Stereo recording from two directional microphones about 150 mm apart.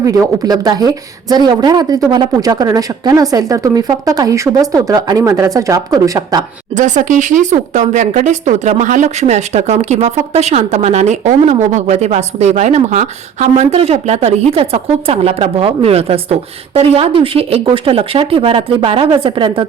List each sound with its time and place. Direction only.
0.0 s a woman's voice: 25° right (ahead or behind)
6.7 s speech: 55° right (ahead or behind); by 19.6 s 35° right (ahead or behind)